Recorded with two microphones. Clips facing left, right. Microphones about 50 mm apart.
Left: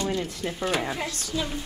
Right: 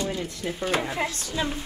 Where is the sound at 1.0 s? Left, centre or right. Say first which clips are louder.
Right 2 dB; right.